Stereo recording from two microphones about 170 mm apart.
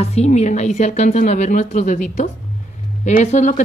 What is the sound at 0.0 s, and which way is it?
A woman's voice, 40° left (ahead or behind).